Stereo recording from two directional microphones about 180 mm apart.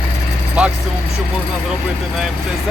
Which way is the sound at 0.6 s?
5° right (ahead or behind).